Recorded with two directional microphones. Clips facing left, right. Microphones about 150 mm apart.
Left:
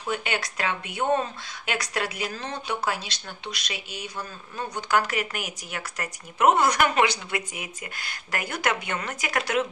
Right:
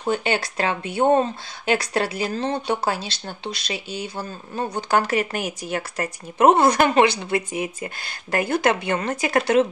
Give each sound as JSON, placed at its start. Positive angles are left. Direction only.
{"t": 0.0, "sound": "speech", "side_deg": -30}